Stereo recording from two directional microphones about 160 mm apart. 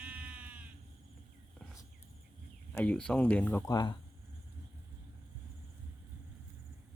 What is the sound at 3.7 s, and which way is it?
Speech, 25° left (ahead or behind).